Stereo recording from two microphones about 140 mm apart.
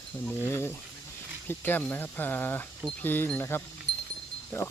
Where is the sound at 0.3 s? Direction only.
15° left (ahead or behind).